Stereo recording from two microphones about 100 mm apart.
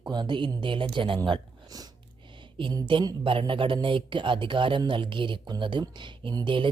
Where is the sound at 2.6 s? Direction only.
55° right (ahead or behind).